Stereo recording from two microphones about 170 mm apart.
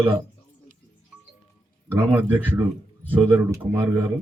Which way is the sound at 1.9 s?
10° right (ahead or behind).